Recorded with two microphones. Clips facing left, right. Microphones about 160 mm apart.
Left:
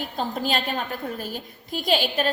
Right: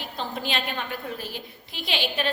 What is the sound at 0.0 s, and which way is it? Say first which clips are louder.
A woman's voice: left 4 dB; 40° left (ahead or behind).